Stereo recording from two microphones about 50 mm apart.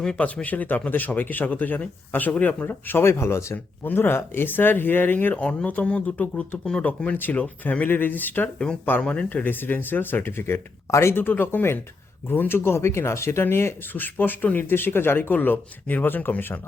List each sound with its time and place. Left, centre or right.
0.4 s speech: left
3.0 s speech: left
3.8 s speech: left
5.3 s speech: left
8.5 s speech: left
9.4 s speech: left
13.9 s speech: left